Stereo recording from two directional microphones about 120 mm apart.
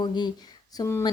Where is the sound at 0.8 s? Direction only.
25° left (ahead or behind).